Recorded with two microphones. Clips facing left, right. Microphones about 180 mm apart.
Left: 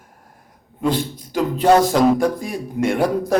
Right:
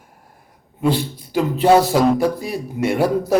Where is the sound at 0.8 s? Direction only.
5° right (ahead or behind).